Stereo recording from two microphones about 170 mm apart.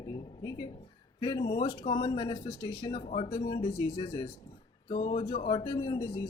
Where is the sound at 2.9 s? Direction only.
40° left (ahead or behind).